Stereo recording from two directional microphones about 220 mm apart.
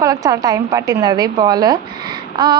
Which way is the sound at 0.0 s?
15° right (ahead or behind).